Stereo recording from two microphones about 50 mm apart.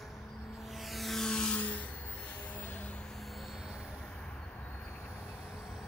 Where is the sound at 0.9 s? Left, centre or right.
Centre.